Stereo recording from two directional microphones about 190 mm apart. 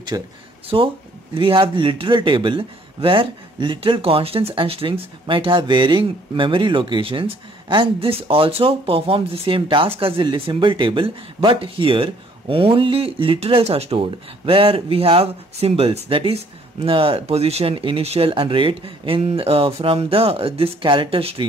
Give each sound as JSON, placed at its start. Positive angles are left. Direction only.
{"t": 0.1, "sound": "a man's voice", "side_deg": -20}